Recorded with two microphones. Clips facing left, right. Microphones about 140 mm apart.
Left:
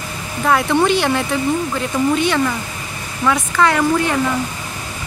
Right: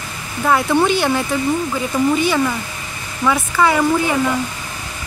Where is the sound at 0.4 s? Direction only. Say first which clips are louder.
Even; centre (ahead or behind).